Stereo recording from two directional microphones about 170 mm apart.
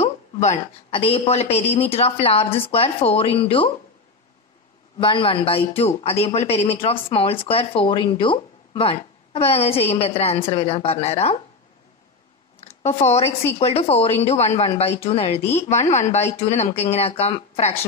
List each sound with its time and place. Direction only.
0.0 s speech: 40° left (ahead or behind)
4.9 s speech: 30° left (ahead or behind)
12.5 s a sound: 40° left (ahead or behind)
13.6 s speech: 35° left (ahead or behind)